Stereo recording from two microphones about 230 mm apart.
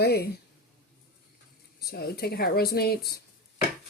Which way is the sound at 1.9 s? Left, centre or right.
Left.